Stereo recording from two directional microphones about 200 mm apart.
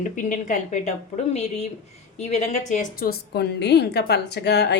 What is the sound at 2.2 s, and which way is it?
A woman's voice, 35° left (ahead or behind).